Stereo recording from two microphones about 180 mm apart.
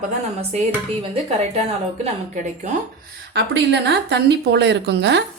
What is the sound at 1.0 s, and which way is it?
Speech, 35° right (ahead or behind).